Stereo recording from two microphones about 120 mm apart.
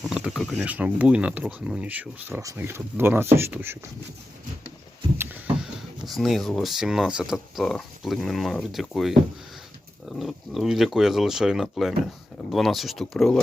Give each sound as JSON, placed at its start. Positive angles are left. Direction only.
{"t": 0.0, "sound": "a sound", "side_deg": 0}
{"t": 0.6, "sound": "speech", "side_deg": -10}
{"t": 2.4, "sound": "speech", "side_deg": -25}
{"t": 5.1, "sound": "vehicle", "side_deg": -20}
{"t": 6.1, "sound": "speech", "side_deg": 0}